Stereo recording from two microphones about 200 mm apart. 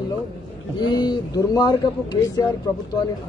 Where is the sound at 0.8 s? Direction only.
20° left (ahead or behind).